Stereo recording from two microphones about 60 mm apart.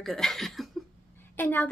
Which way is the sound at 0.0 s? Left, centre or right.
Centre.